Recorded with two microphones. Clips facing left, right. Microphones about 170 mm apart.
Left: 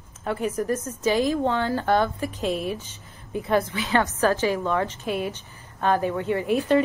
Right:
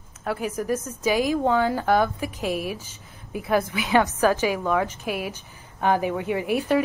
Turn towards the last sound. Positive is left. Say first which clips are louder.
# left 1 dB
turn(degrees=-15)  # may be behind; listen again after turning